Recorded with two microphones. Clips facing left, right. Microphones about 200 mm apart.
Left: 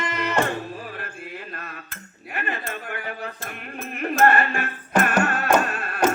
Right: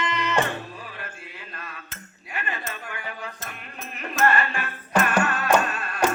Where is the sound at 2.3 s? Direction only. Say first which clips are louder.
Left 3 dB; 50° left (ahead or behind).